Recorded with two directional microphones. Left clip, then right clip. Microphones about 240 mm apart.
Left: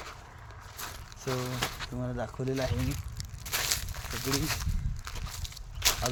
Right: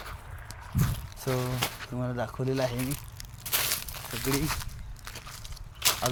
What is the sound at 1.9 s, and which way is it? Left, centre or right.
Speech, centre.